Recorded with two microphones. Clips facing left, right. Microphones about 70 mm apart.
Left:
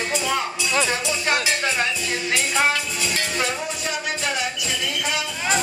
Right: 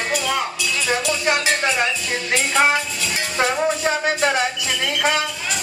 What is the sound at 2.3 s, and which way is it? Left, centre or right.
Music, right.